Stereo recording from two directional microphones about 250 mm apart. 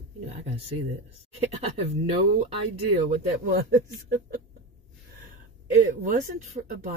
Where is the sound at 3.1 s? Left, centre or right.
Right.